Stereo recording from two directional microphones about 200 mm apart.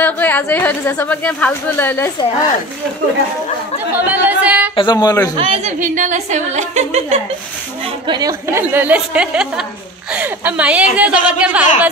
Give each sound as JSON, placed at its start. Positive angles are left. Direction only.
{"t": 0.0, "sound": "a woman's voice", "side_deg": 10}
{"t": 3.9, "sound": "chatter", "side_deg": -10}
{"t": 4.7, "sound": "speech", "side_deg": 20}
{"t": 5.3, "sound": "speech", "side_deg": -25}
{"t": 5.8, "sound": "a woman's voice", "side_deg": -40}
{"t": 8.1, "sound": "a woman's voice", "side_deg": -15}